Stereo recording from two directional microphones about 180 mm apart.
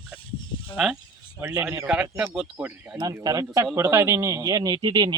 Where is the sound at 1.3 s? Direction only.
15° right (ahead or behind).